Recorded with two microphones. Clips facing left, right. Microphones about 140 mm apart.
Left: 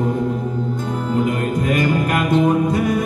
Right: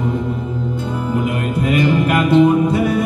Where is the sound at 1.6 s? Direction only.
45° left (ahead or behind).